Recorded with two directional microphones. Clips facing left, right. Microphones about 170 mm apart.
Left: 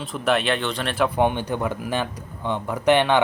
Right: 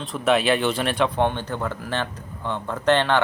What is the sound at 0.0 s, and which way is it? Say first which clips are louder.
A man's voice: right 2 dB; centre (ahead or behind).